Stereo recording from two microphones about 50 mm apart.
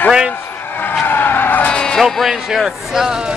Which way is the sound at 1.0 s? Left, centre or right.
Left.